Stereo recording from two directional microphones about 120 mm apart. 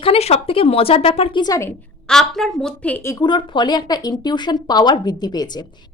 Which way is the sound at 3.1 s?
40° left (ahead or behind).